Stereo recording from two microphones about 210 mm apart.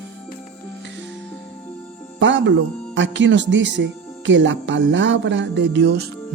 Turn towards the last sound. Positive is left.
turn(degrees=-55)  # may be behind; listen again after turning